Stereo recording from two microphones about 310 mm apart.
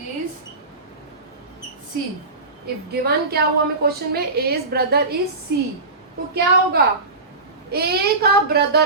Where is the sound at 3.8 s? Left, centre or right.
Right.